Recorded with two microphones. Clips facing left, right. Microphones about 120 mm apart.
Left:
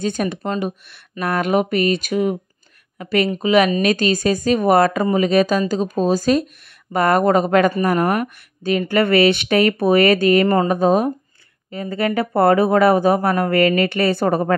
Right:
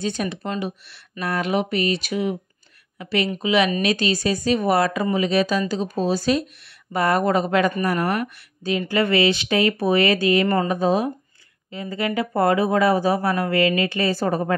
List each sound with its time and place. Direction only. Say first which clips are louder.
0.0 s speech: left 4 dB; 45° left (ahead or behind)